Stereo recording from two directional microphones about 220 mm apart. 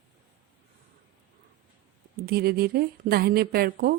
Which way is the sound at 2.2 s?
45° right (ahead or behind).